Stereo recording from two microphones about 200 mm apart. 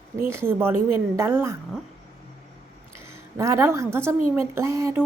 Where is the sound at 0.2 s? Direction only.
10° right (ahead or behind).